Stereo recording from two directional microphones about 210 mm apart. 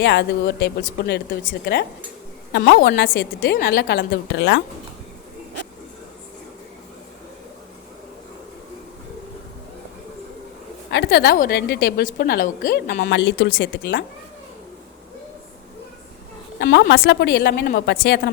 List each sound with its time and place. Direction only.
0.0 s a woman's voice: 55° left (ahead or behind)
10.9 s a woman's voice: 55° left (ahead or behind)
16.6 s a woman's voice: 50° left (ahead or behind)